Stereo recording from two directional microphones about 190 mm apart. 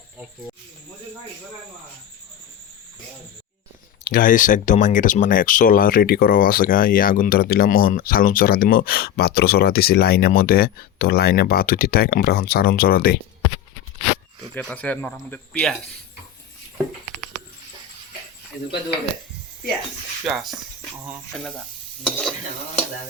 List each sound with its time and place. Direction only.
4.0 s speech: 50° left (ahead or behind)
14.5 s speech: 10° left (ahead or behind)
20.2 s stir: centre (ahead or behind)
20.9 s speech: 15° right (ahead or behind)
22.0 s stir: 5° left (ahead or behind)